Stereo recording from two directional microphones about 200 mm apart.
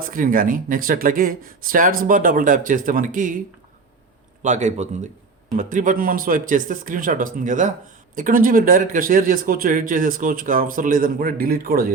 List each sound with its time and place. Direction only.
0.0 s a man's voice: 45° right (ahead or behind)
4.4 s a man's voice: 35° right (ahead or behind)